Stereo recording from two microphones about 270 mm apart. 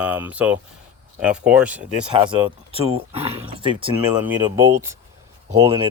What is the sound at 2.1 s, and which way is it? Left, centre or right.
Speech, centre.